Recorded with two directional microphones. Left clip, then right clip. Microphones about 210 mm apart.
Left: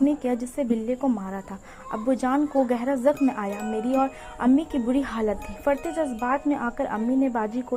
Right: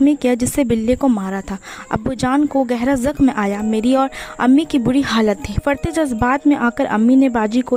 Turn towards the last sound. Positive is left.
turn(degrees=-40)  # may be behind; listen again after turning